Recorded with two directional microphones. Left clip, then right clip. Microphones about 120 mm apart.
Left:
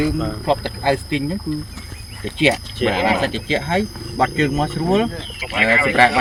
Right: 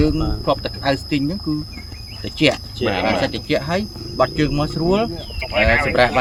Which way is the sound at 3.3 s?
35° right (ahead or behind).